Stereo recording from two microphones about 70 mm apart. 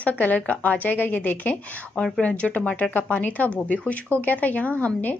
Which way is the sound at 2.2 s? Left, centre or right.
Centre.